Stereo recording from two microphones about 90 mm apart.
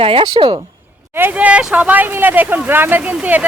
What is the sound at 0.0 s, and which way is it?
Speech, 85° right.